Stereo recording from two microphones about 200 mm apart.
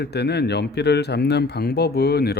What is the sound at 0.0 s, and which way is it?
Speech, 55° left (ahead or behind).